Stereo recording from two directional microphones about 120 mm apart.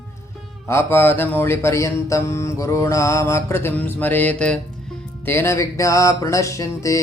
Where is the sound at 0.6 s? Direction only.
20° left (ahead or behind).